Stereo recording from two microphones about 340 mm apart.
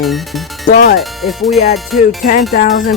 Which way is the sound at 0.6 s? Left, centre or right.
Left.